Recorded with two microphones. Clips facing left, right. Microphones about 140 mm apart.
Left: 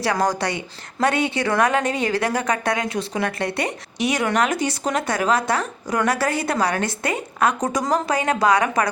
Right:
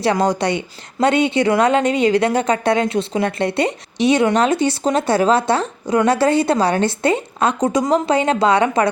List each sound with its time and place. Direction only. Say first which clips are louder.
0.0 s a woman's voice: right 4 dB; 25° right (ahead or behind)